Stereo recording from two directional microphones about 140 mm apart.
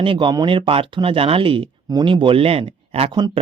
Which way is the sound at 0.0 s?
40° right (ahead or behind).